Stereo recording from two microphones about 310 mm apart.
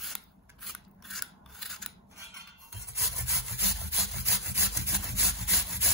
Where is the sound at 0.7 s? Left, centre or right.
Centre.